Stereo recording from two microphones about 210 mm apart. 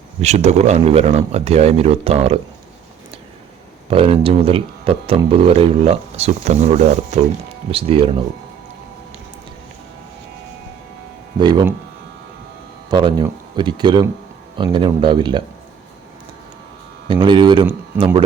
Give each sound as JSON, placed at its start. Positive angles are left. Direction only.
{"t": 0.2, "sound": "speech", "side_deg": -30}
{"t": 3.8, "sound": "speech", "side_deg": -25}
{"t": 11.3, "sound": "speech", "side_deg": -20}
{"t": 12.9, "sound": "speech", "side_deg": -20}
{"t": 17.1, "sound": "speech", "side_deg": -20}